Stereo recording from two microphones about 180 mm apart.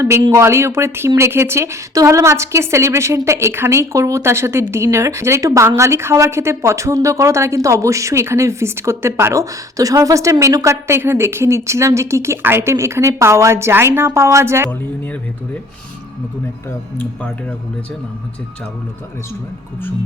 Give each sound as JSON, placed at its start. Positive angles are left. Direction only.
{"t": 0.0, "sound": "a woman's voice", "side_deg": -20}